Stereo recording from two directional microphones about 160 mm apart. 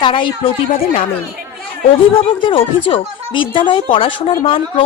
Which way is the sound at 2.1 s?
35° left (ahead or behind).